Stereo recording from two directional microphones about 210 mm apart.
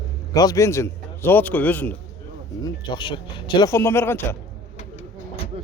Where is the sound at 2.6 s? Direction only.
20° left (ahead or behind).